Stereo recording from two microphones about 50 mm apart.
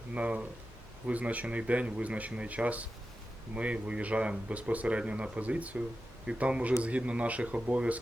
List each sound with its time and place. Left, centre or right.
0.1 s speech: right